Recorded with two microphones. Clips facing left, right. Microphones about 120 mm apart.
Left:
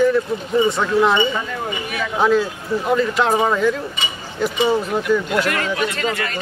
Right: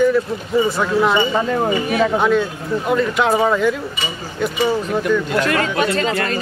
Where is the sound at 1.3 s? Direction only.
40° right (ahead or behind).